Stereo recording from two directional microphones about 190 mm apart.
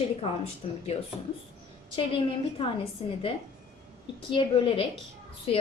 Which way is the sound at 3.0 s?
30° left (ahead or behind).